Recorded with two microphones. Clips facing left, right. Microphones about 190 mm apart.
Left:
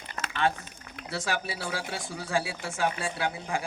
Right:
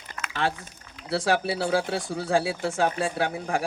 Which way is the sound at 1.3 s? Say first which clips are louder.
Right 10 dB; 60° right (ahead or behind).